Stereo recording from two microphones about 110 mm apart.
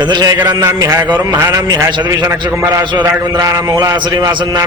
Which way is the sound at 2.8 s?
45° right (ahead or behind).